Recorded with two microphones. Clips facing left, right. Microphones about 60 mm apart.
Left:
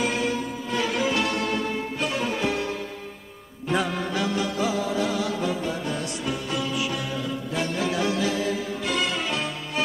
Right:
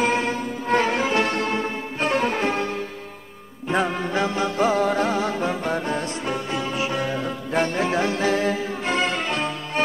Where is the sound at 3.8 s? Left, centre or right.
Right.